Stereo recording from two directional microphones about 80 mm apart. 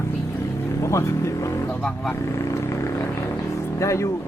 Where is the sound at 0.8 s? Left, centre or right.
Left.